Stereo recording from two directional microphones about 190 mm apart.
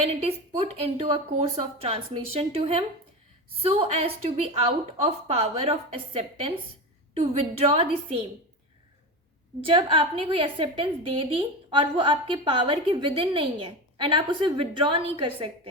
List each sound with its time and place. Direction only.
0.0 s a woman's voice: 35° right (ahead or behind)
9.6 s a woman's voice: 30° right (ahead or behind)